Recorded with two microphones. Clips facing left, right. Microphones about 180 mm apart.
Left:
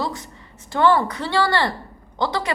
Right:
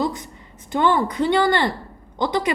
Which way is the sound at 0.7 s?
20° right (ahead or behind).